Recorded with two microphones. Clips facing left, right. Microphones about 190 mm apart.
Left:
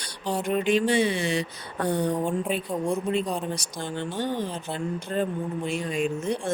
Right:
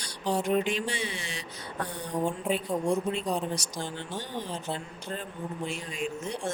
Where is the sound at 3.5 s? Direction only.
55° left (ahead or behind).